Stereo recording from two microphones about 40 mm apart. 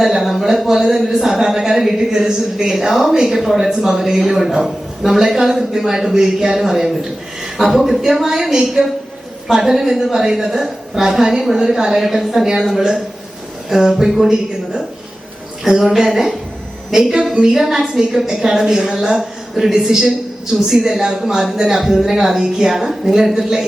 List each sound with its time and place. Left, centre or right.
0.0 s a man's voice: centre